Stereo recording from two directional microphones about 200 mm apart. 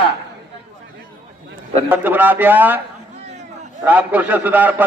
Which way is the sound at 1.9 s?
10° right (ahead or behind).